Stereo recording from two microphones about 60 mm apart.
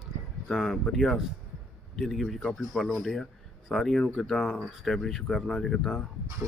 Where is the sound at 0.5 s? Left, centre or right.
Centre.